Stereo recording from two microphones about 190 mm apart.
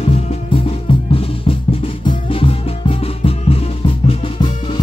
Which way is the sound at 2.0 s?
30° left (ahead or behind).